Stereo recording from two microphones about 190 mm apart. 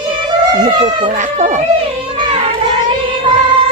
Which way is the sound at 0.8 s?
35° right (ahead or behind).